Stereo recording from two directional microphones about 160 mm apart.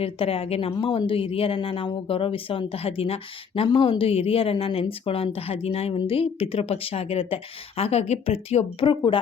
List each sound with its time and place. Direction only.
0.0 s a woman's voice: 35° left (ahead or behind)